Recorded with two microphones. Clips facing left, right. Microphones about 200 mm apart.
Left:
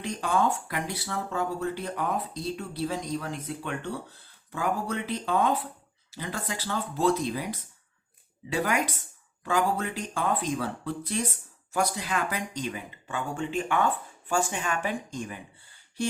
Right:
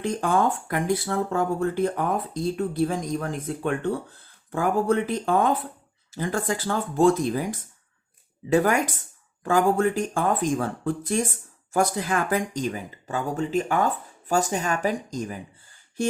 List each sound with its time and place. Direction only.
0.0 s speech: 50° right (ahead or behind)